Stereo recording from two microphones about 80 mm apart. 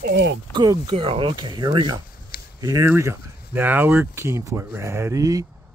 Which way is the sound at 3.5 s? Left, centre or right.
Right.